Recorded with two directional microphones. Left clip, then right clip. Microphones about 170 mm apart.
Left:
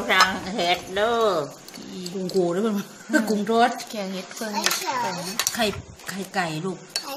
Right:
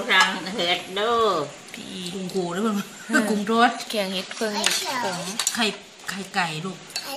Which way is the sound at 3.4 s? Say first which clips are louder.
Even; 60° left (ahead or behind).